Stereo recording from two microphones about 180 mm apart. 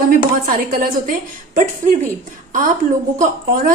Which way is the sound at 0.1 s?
50° right (ahead or behind).